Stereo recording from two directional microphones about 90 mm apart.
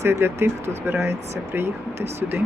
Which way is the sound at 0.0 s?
30° right (ahead or behind).